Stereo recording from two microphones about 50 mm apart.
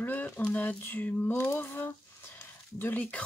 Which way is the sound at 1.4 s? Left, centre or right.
Left.